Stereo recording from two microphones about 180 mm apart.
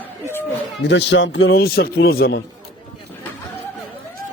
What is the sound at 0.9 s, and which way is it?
A man's voice, 85° left.